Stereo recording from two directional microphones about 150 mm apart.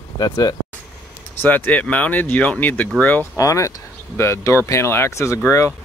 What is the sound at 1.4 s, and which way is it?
Speech, 10° left (ahead or behind).